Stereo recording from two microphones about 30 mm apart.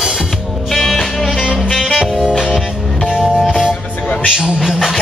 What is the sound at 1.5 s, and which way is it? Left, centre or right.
Saxophone, centre.